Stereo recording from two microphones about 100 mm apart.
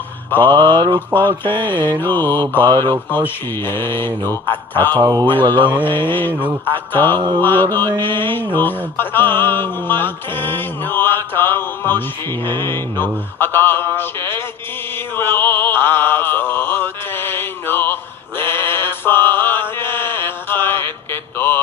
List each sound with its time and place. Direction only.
0.4 s mantra: 50° right (ahead or behind)
1.5 s music: 20° left (ahead or behind)
2.7 s mantra: 40° right (ahead or behind)
3.2 s music: 20° left (ahead or behind)
4.9 s mantra: 35° right (ahead or behind)
5.4 s mantra: 50° right (ahead or behind)
5.8 s music: 20° left (ahead or behind)
7.2 s mantra: 50° right (ahead or behind)
7.4 s music: 20° left (ahead or behind)
14.9 s mantra: 20° left (ahead or behind)